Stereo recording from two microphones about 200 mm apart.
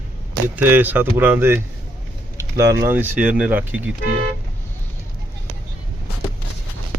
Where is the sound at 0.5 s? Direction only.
10° right (ahead or behind).